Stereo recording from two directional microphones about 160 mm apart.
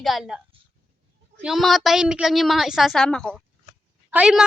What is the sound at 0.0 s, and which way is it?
A woman's voice, centre (ahead or behind).